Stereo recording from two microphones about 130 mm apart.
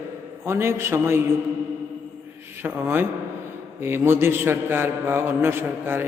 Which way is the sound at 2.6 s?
15° right (ahead or behind).